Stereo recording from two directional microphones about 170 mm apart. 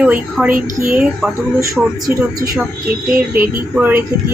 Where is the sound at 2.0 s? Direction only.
20° right (ahead or behind).